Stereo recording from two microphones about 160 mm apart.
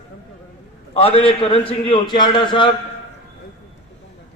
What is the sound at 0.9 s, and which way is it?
A man's voice, 35° left (ahead or behind).